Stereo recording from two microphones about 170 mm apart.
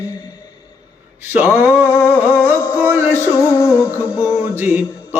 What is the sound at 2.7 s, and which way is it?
Music, 15° right (ahead or behind).